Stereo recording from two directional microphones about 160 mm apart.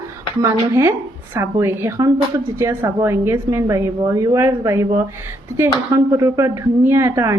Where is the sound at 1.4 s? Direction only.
15° right (ahead or behind).